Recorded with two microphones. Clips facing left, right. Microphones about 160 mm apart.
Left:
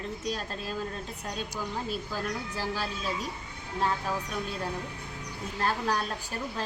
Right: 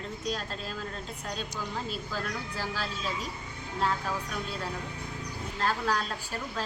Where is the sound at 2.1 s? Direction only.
15° left (ahead or behind).